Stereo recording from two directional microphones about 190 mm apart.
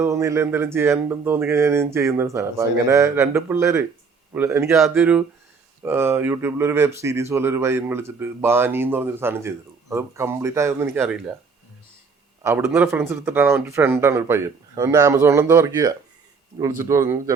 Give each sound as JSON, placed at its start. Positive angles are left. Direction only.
{"t": 0.0, "sound": "speech", "side_deg": -15}
{"t": 12.4, "sound": "speech", "side_deg": -15}